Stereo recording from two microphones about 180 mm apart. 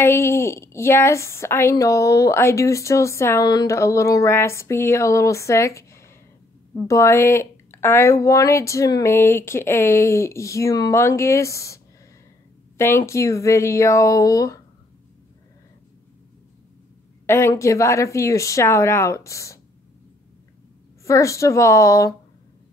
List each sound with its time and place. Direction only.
0.0 s a woman's voice: 15° left (ahead or behind)
17.3 s a woman's voice: 15° left (ahead or behind)
21.0 s a woman's voice: 15° left (ahead or behind)